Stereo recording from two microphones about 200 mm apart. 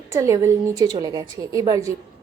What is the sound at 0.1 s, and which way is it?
A woman's voice, 15° right (ahead or behind).